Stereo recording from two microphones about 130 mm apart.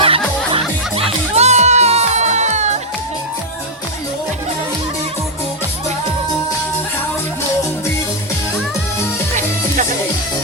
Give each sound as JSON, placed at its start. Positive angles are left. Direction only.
{"t": 0.0, "sound": "music", "side_deg": -45}